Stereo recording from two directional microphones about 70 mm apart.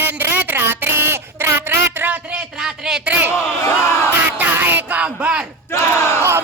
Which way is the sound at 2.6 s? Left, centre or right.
Centre.